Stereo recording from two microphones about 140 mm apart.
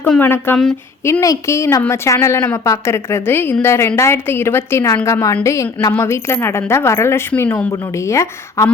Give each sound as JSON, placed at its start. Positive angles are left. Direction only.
{"t": 0.2, "sound": "a woman's voice", "side_deg": 15}